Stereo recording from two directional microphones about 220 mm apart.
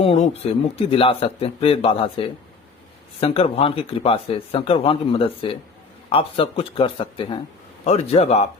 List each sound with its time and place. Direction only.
0.0 s speech: 25° left (ahead or behind)